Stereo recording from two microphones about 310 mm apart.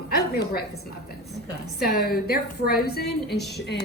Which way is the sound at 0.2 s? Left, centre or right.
Left.